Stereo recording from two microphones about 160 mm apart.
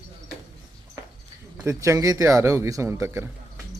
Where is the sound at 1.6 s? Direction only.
20° right (ahead or behind).